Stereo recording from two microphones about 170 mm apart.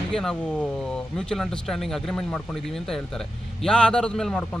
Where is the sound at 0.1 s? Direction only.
5° left (ahead or behind).